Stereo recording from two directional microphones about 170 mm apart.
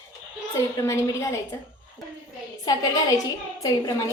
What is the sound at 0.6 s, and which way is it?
Speech, 15° left (ahead or behind).